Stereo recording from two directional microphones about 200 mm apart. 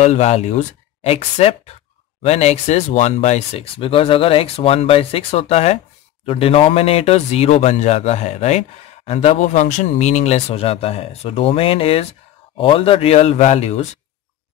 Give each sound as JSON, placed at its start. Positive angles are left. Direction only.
{"t": 0.0, "sound": "speech", "side_deg": 35}